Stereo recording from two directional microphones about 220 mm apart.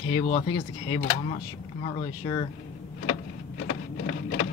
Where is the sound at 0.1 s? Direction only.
30° left (ahead or behind).